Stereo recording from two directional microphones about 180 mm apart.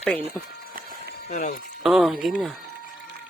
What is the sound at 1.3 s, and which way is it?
Speech, 45° left (ahead or behind).